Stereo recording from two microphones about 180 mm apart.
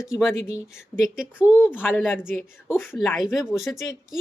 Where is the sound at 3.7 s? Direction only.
20° left (ahead or behind).